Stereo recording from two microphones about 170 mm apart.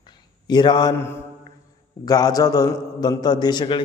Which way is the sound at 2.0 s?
20° left (ahead or behind).